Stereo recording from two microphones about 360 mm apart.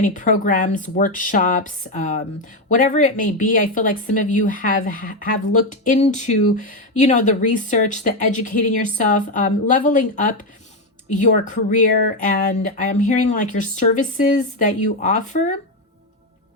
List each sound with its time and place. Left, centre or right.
0.0 s speech: left